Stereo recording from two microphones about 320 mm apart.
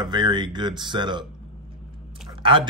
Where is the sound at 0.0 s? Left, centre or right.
Centre.